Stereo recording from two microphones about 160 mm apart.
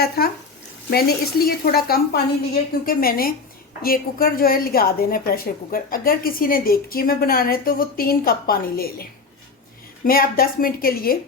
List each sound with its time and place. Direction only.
0.9 s a woman's voice: 75° left (ahead or behind)
10.1 s speech: 65° left (ahead or behind)